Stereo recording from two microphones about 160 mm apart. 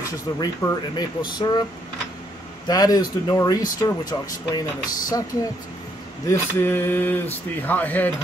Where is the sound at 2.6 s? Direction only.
25° left (ahead or behind).